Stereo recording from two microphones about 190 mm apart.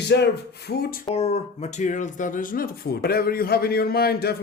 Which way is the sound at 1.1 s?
35° left (ahead or behind).